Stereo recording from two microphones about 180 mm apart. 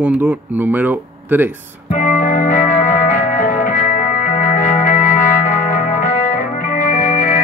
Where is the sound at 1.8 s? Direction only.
45° left (ahead or behind).